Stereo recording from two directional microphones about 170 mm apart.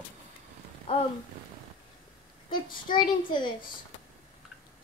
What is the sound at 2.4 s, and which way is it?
A woman's voice, 25° left (ahead or behind).